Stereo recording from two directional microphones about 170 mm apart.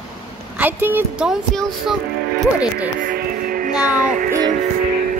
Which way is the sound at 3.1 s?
55° right (ahead or behind).